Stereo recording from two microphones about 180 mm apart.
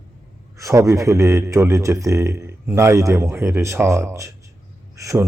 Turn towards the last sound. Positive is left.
turn(degrees=-15)  # may be behind; listen again after turning